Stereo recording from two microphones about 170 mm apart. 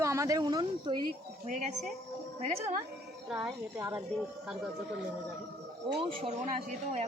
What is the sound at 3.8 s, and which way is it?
Speech, 20° right (ahead or behind).